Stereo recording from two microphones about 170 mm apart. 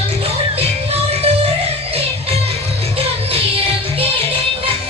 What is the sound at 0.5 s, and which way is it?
Music, 35° right (ahead or behind).